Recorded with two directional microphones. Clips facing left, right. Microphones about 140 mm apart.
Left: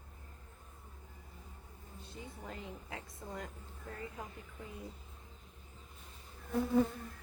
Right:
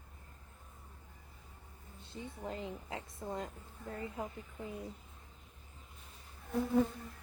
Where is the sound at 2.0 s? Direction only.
25° right (ahead or behind).